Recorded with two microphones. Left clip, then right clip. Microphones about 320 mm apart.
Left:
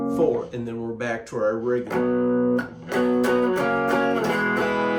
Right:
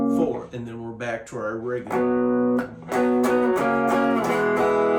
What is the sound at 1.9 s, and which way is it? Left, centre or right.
Music, centre.